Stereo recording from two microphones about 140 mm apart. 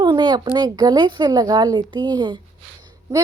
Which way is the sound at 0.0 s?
35° right (ahead or behind).